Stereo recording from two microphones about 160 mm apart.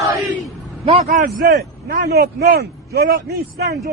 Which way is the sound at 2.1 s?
80° right.